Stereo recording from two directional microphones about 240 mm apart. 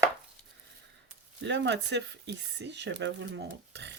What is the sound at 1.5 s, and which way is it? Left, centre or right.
Speech, right.